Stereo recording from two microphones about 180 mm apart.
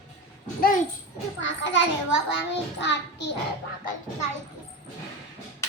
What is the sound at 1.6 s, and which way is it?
Speech, 90° left.